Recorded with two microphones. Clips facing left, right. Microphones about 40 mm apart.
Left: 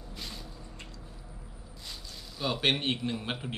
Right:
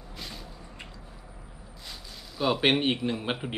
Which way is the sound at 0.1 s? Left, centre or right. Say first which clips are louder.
Right 1 dB; centre.